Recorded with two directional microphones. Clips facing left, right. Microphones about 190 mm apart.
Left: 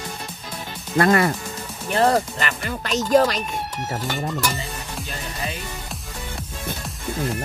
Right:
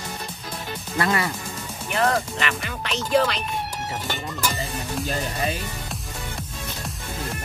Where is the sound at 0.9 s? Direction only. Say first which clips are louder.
Left 6 dB; 50° left (ahead or behind).